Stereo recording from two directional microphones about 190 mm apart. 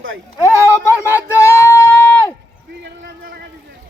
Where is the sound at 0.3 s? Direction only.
15° left (ahead or behind).